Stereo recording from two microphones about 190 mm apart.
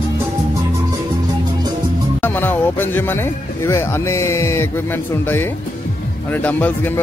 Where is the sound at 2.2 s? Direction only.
10° left (ahead or behind).